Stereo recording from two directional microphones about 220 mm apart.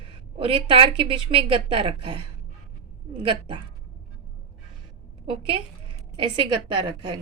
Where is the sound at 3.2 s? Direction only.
25° right (ahead or behind).